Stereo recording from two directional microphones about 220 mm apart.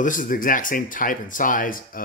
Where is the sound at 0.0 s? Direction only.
35° left (ahead or behind).